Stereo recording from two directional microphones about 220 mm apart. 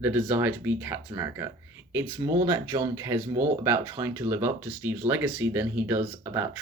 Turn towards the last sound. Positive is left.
turn(degrees=-10)  # may be behind; listen again after turning